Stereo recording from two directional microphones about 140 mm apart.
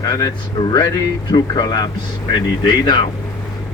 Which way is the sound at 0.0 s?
25° left (ahead or behind).